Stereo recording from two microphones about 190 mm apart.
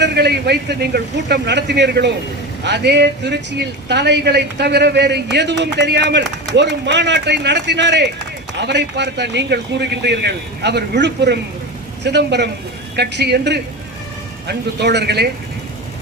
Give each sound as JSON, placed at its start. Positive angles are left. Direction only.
{"t": 0.0, "sound": "a man's voice", "side_deg": -60}